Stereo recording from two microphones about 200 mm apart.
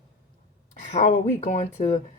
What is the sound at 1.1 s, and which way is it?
Speech, 35° left (ahead or behind).